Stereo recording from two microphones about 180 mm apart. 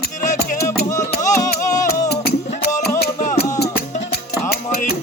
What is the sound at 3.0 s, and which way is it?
Music, 50° left (ahead or behind).